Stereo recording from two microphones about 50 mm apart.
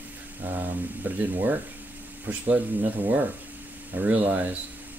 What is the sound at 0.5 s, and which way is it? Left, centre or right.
Speech, right.